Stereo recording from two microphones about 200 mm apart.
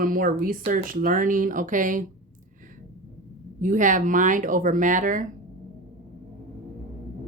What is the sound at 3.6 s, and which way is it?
Speech, 40° right (ahead or behind).